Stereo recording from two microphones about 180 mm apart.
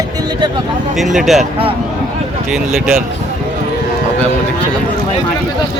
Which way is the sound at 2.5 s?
Centre (ahead or behind).